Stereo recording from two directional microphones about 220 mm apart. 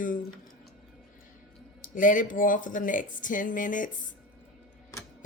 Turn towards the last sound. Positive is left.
turn(degrees=35)  # may be behind; listen again after turning